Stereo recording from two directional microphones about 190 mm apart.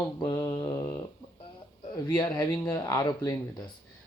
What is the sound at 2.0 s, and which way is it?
Speech, 20° left (ahead or behind).